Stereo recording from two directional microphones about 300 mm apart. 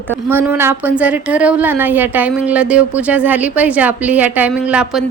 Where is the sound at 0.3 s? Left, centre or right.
Centre.